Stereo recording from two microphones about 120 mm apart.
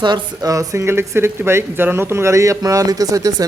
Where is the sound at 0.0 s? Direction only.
35° right (ahead or behind).